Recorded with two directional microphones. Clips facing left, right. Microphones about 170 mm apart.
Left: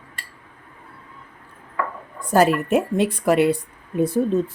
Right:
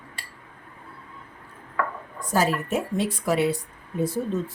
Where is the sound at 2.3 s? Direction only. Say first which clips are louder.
Left 7 dB; 60° left (ahead or behind).